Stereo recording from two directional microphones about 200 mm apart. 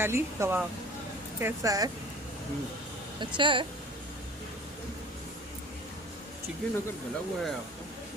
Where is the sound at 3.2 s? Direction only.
25° right (ahead or behind).